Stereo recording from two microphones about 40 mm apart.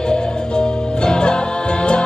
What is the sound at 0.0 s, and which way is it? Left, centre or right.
Music, left.